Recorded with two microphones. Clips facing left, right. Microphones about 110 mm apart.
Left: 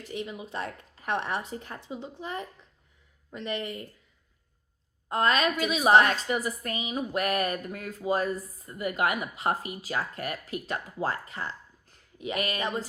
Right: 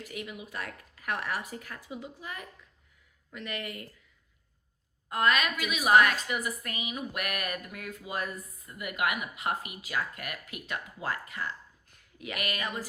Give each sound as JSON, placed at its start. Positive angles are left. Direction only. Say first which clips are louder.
{"t": 0.0, "sound": "speech", "louder": "left 4 dB", "side_deg": 30}
{"t": 5.0, "sound": "a woman's voice", "louder": "left 2 dB", "side_deg": 30}